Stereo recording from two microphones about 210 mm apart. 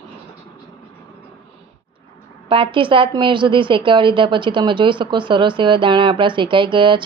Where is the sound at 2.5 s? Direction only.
25° right (ahead or behind).